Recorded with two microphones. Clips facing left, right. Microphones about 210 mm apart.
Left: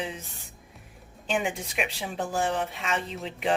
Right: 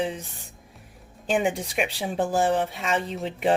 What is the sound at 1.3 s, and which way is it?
Speech, 35° right (ahead or behind).